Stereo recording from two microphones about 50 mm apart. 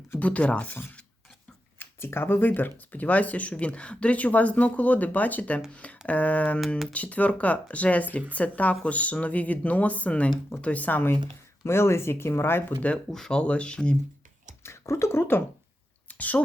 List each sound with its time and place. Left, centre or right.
0.2 s speech: left
1.8 s speech: left
11.6 s speech: left
13.1 s speech: centre
13.4 s speech: left
14.6 s speech: left
16.0 s a sound: left